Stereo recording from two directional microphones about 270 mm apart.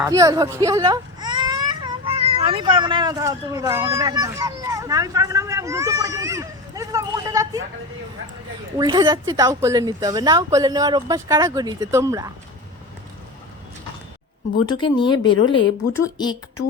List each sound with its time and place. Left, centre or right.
0.0 s speech: centre
8.8 s speech: centre
14.7 s speech: centre
15.4 s speech: left
15.9 s speech: centre